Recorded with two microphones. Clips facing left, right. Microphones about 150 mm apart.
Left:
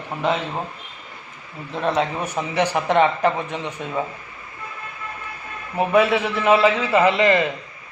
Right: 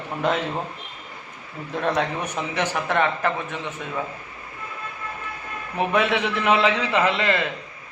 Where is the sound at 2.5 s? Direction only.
15° left (ahead or behind).